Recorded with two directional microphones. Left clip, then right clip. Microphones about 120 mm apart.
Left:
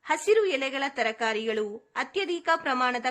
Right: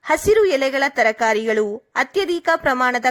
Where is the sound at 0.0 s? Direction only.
35° right (ahead or behind).